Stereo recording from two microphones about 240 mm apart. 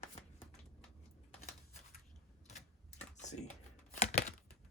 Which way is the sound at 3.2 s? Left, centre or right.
Left.